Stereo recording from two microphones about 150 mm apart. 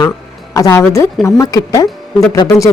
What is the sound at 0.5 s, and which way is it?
Speech, 20° left (ahead or behind).